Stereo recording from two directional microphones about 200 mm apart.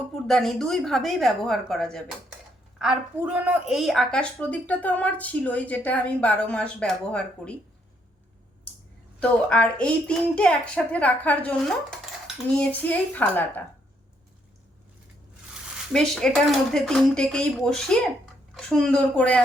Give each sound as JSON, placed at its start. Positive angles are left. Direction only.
{"t": 0.3, "sound": "a woman's voice", "side_deg": 0}
{"t": 9.2, "sound": "a woman's voice", "side_deg": 5}
{"t": 15.9, "sound": "speech", "side_deg": 5}